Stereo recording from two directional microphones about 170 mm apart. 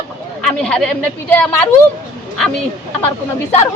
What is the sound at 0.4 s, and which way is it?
A woman's voice, 5° left (ahead or behind).